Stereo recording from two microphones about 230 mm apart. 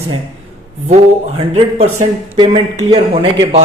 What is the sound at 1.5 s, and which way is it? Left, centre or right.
A man's voice, right.